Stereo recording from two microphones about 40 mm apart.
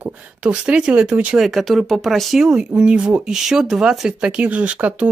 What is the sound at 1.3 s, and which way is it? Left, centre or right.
Speech, centre.